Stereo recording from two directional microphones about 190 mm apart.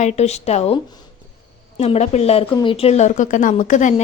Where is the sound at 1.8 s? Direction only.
35° left (ahead or behind).